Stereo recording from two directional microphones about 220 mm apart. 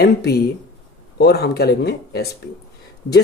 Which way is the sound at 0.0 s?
50° left (ahead or behind).